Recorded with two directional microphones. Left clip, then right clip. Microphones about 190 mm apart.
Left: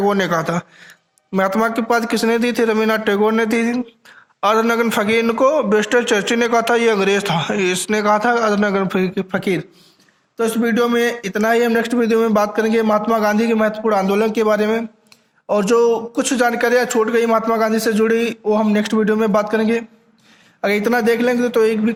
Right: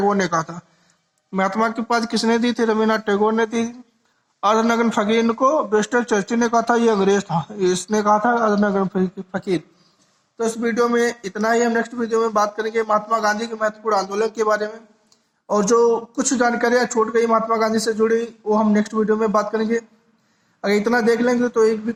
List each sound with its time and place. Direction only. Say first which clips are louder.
0.0 s a man's voice: left 2 dB; 45° left (ahead or behind)
1.5 s speech: left 3 dB; 20° left (ahead or behind)
1.9 s a man's voice: left 3 dB; 45° left (ahead or behind)
5.3 s a man's voice: left 3 dB; 45° left (ahead or behind)